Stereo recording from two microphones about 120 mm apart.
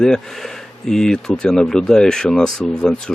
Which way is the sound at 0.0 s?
5° left (ahead or behind).